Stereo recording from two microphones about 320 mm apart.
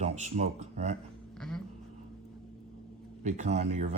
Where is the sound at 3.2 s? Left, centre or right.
Right.